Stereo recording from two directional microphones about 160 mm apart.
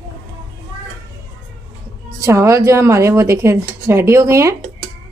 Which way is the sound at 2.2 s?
20° right (ahead or behind).